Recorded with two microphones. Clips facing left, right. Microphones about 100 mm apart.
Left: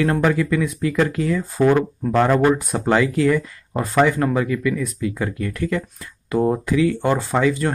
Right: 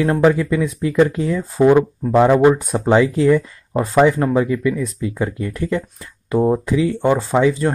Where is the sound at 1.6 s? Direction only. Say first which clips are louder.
Right 4 dB; 15° right (ahead or behind).